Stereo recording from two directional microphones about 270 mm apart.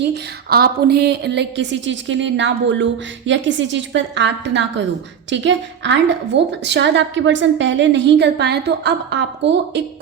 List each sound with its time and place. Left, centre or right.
0.1 s a woman's voice: right